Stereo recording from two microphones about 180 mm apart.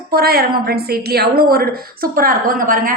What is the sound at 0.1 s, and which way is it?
A woman's voice, 60° right (ahead or behind).